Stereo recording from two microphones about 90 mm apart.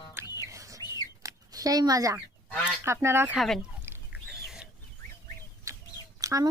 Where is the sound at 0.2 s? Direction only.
25° right (ahead or behind).